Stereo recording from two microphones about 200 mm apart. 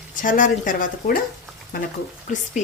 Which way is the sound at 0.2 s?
40° left (ahead or behind).